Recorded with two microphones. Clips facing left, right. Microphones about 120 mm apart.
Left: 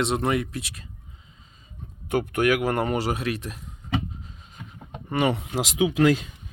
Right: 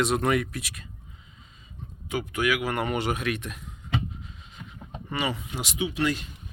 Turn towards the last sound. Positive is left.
turn(degrees=90)